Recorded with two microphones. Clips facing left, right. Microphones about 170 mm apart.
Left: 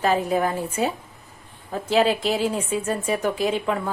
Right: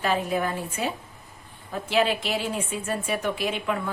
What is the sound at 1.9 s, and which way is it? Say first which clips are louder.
A woman's voice: left 4 dB; 35° left (ahead or behind).